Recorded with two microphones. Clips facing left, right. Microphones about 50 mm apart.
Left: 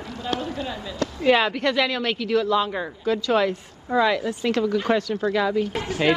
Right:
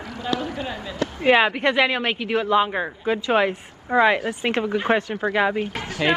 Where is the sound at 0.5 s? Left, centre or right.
Right.